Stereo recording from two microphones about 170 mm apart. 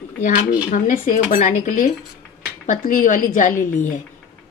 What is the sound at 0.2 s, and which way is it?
Speech, 50° left (ahead or behind).